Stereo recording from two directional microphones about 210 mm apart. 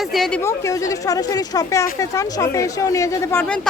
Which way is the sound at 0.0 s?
Centre (ahead or behind).